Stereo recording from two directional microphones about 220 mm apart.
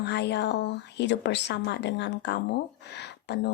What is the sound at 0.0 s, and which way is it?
A woman's voice, 50° left (ahead or behind).